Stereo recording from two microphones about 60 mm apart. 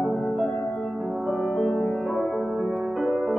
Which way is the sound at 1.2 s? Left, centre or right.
Centre.